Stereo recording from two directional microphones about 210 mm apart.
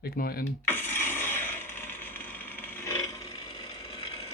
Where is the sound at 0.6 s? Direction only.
10° left (ahead or behind).